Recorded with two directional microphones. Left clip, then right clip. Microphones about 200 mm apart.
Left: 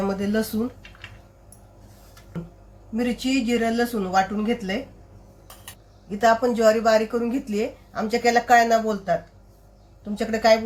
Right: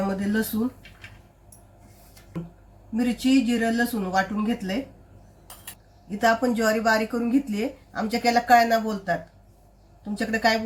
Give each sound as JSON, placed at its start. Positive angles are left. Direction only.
{"t": 0.1, "sound": "speech", "side_deg": 15}
{"t": 2.9, "sound": "speech", "side_deg": 15}
{"t": 6.1, "sound": "speech", "side_deg": 20}
{"t": 10.2, "sound": "speech", "side_deg": 15}